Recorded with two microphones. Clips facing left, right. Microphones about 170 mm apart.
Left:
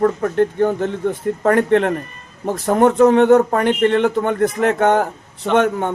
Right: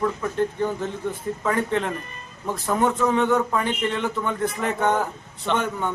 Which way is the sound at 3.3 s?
50° left (ahead or behind).